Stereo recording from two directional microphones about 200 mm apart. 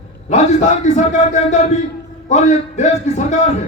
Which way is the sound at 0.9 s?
35° left (ahead or behind).